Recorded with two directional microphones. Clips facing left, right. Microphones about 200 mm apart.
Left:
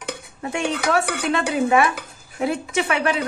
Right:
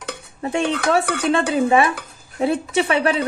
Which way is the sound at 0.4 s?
30° right (ahead or behind).